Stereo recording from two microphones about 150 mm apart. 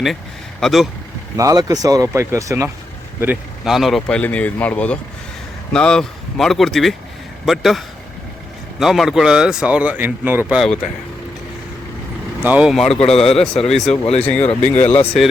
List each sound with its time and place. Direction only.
0.6 s speech: centre (ahead or behind)
1.4 s speech: 25° right (ahead or behind)
3.6 s speech: centre (ahead or behind)
10.6 s speech: 5° left (ahead or behind)
12.4 s speech: 10° right (ahead or behind)
12.7 s speech: centre (ahead or behind)